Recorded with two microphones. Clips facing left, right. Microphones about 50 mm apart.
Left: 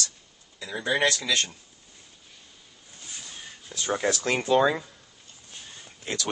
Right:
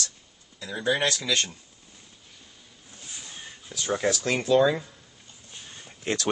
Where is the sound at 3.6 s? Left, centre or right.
Centre.